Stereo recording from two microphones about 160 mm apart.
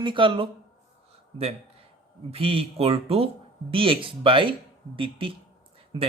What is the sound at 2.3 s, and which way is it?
Speech, 35° right (ahead or behind).